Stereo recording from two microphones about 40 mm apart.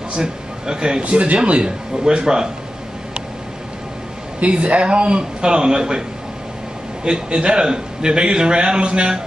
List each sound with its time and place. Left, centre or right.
0.1 s a man's voice: centre
1.0 s speech: right
1.6 s a man's voice: centre
4.4 s a man's voice: right
7.1 s a man's voice: right